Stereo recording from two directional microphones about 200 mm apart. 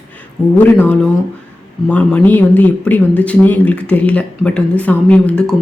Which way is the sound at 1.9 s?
10° left (ahead or behind).